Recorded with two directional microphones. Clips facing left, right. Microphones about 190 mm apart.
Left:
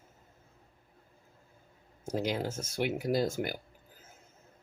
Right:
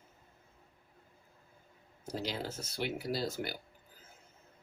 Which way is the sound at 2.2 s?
50° left (ahead or behind).